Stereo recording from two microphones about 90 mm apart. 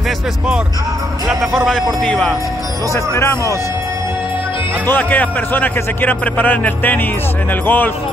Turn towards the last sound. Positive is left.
turn(degrees=20)  # may be behind; listen again after turning